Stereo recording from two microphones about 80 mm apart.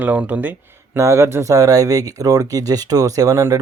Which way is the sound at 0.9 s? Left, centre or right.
Right.